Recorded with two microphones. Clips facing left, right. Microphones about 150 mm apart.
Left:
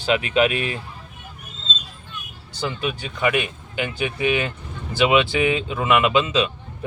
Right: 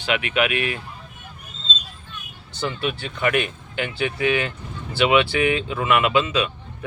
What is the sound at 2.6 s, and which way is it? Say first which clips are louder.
Speech: even; 15° left (ahead or behind).